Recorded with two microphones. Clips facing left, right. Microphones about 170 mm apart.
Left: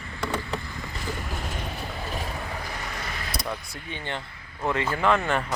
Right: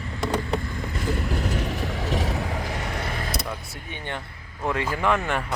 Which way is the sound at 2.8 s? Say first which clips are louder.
Right 5 dB; 60° right (ahead or behind).